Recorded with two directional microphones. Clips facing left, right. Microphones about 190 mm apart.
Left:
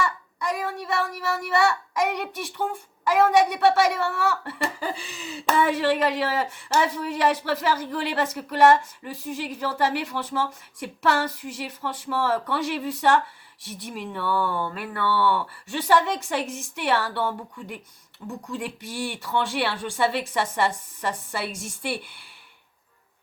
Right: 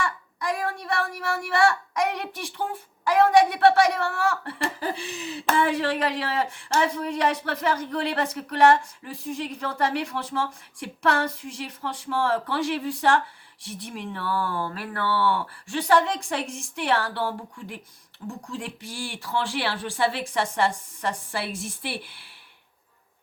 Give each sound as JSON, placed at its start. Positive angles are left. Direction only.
{"t": 0.0, "sound": "speech", "side_deg": 0}